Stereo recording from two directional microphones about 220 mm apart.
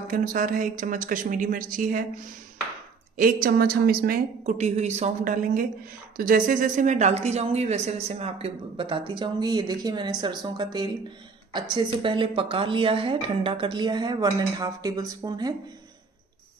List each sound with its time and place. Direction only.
0.1 s a woman's voice: 40° right (ahead or behind)
3.4 s a woman's voice: 45° right (ahead or behind); by 15.5 s 15° right (ahead or behind)